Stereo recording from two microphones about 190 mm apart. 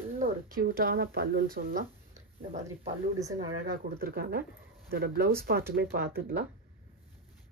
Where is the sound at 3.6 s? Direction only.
50° right (ahead or behind).